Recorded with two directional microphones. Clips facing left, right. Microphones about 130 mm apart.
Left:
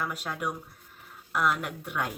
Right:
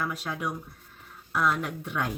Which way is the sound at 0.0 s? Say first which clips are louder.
Right 1 dB; 10° left (ahead or behind).